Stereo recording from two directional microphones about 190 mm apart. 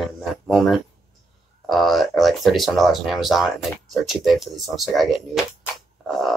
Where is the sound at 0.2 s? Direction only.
Centre (ahead or behind).